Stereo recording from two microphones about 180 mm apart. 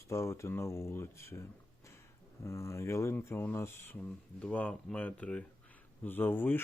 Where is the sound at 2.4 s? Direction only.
15° left (ahead or behind).